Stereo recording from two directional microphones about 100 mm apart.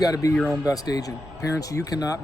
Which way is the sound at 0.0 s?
35° left (ahead or behind).